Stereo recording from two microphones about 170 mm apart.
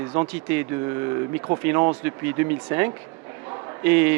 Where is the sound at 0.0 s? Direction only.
20° right (ahead or behind).